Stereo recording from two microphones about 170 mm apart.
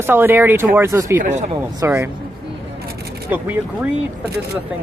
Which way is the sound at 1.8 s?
15° right (ahead or behind).